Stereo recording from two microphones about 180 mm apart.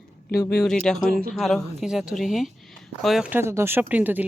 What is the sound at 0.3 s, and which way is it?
Speech, 60° left (ahead or behind).